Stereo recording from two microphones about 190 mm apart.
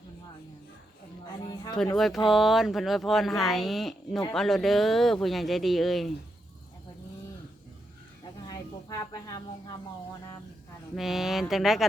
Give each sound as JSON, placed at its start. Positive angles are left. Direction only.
{"t": 2.2, "sound": "speech", "side_deg": 0}
{"t": 8.4, "sound": "a woman's voice", "side_deg": 20}
{"t": 10.9, "sound": "speech", "side_deg": 0}